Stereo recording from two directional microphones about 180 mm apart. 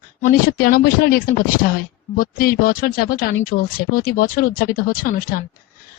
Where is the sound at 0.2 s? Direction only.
55° left (ahead or behind).